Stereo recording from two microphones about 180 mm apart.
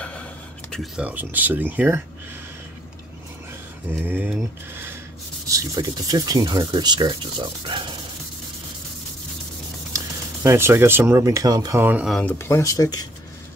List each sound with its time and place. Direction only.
0.0 s a sound: 5° left (ahead or behind)
1.0 s speech: 10° right (ahead or behind)
3.9 s speech: 10° right (ahead or behind)
9.9 s speech: 15° right (ahead or behind)
11.8 s speech: 5° right (ahead or behind)
12.2 s speech: 10° left (ahead or behind)